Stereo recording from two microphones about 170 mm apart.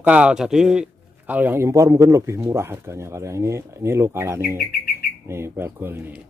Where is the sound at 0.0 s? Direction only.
5° right (ahead or behind).